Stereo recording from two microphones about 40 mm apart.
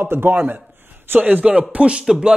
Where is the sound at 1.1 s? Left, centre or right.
Right.